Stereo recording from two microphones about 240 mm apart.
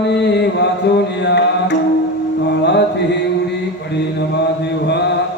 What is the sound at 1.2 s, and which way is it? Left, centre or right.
Music, left.